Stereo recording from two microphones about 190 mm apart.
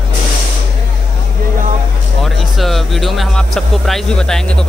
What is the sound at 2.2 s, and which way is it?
Speech, centre (ahead or behind).